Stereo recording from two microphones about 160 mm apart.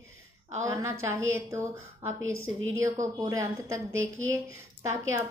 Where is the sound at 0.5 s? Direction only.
20° right (ahead or behind).